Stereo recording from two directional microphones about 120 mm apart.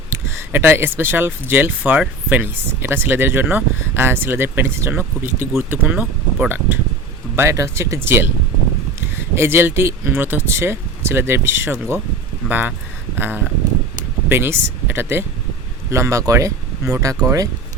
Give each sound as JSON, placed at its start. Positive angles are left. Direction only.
{"t": 0.3, "sound": "speech", "side_deg": -20}
{"t": 13.1, "sound": "a sound", "side_deg": -15}
{"t": 14.3, "sound": "speech", "side_deg": -20}